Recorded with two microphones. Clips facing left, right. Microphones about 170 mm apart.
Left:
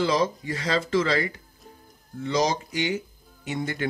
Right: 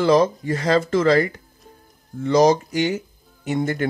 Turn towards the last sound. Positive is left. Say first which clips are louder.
# right 6 dB
turn(degrees=-45)  # may be behind; listen again after turning